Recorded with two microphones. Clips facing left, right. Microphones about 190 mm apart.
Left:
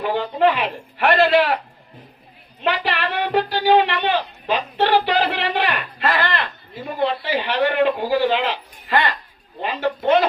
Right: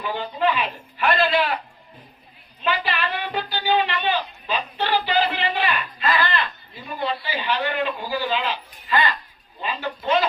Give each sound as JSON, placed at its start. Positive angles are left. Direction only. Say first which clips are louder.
{"t": 0.0, "sound": "speech", "louder": "left 5 dB", "side_deg": 65}
{"t": 2.6, "sound": "speech", "louder": "left 3 dB", "side_deg": 70}